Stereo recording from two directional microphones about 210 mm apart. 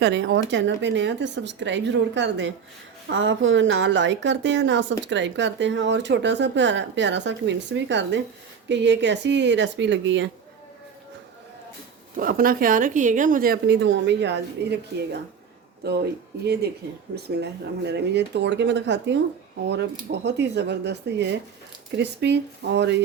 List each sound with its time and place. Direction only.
0.0 s a woman's voice: 60° right (ahead or behind)
12.1 s speech: 45° right (ahead or behind)
17.2 s a woman's voice: 50° right (ahead or behind)